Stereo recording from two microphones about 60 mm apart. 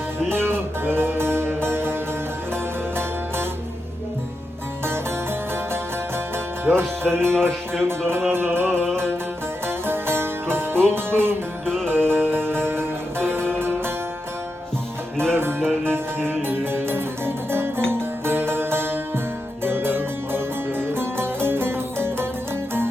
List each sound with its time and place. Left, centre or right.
0.3 s music: right
6.3 s music: right
7.4 s speech: right
9.6 s music: right
11.6 s music: centre
11.9 s music: right
15.8 s music: right